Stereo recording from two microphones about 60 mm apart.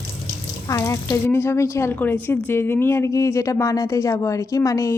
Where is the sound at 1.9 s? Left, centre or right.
Left.